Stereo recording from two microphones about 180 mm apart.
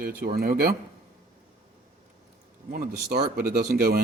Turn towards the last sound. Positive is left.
turn(degrees=-60)  # may be behind; listen again after turning